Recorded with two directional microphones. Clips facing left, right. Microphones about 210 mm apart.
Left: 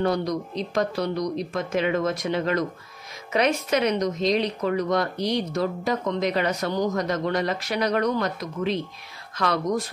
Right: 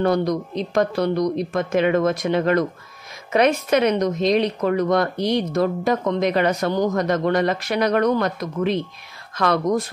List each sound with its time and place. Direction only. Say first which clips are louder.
0.0 s speech: right 4 dB; 55° right (ahead or behind)